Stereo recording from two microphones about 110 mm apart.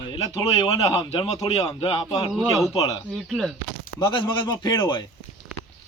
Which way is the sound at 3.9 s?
45° left (ahead or behind).